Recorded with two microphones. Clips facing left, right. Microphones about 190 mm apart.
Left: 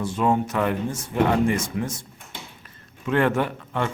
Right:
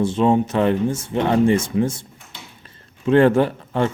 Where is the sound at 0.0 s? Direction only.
25° right (ahead or behind).